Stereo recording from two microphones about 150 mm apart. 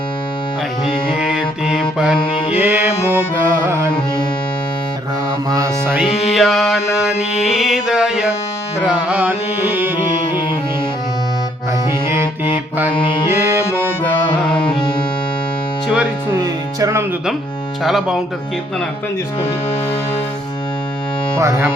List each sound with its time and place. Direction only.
1.6 s music: 5° right (ahead or behind)
5.5 s mantra: 20° right (ahead or behind)
6.0 s music: centre (ahead or behind)
12.0 s music: 15° right (ahead or behind)
13.3 s music: 15° right (ahead or behind)
14.7 s music: 30° left (ahead or behind)
16.3 s music: 20° right (ahead or behind)
17.8 s music: centre (ahead or behind)
21.3 s music: 20° right (ahead or behind)